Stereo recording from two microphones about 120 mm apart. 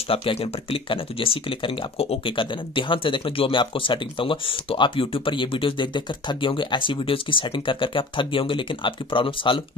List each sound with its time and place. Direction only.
0.1 s speech: 50° left (ahead or behind)